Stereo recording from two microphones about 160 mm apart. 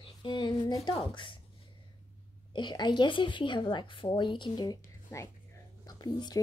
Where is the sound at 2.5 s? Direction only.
30° left (ahead or behind).